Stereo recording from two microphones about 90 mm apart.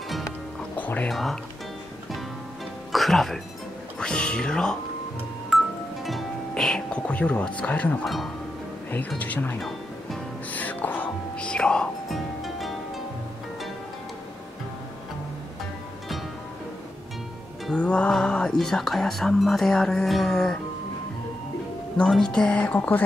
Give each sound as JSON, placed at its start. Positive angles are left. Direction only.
{"t": 0.7, "sound": "music", "side_deg": 20}
{"t": 1.0, "sound": "speech", "side_deg": 5}
{"t": 2.9, "sound": "music", "side_deg": 0}
{"t": 4.0, "sound": "speech", "side_deg": 10}
{"t": 5.5, "sound": "music", "side_deg": 0}
{"t": 6.5, "sound": "speech", "side_deg": 10}
{"t": 8.0, "sound": "speech", "side_deg": 0}
{"t": 9.2, "sound": "speech", "side_deg": 20}
{"t": 10.5, "sound": "music", "side_deg": 20}
{"t": 17.6, "sound": "speech", "side_deg": 10}
{"t": 21.9, "sound": "speech", "side_deg": 10}